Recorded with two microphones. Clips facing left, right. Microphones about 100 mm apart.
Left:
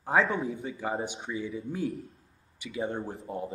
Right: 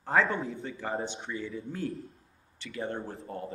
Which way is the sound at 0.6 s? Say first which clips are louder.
Left 2 dB; 10° left (ahead or behind).